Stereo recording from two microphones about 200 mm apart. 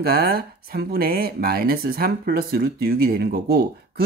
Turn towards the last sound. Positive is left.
turn(degrees=-50)  # may be behind; listen again after turning